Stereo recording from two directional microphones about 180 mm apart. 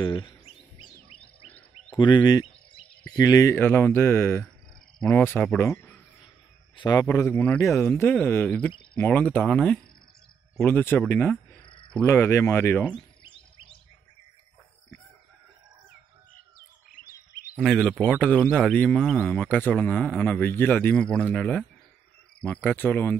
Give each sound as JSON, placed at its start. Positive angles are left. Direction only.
{"t": 0.0, "sound": "speech", "side_deg": 25}
{"t": 1.2, "sound": "wild animals", "side_deg": 10}
{"t": 2.0, "sound": "a sound", "side_deg": 25}
{"t": 3.2, "sound": "speech", "side_deg": 20}
{"t": 11.6, "sound": "cricket", "side_deg": 25}
{"t": 11.9, "sound": "speech", "side_deg": 10}
{"t": 16.5, "sound": "bird", "side_deg": 55}
{"t": 17.6, "sound": "speech", "side_deg": 0}